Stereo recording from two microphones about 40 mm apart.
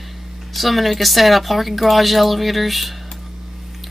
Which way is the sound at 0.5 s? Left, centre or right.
Centre.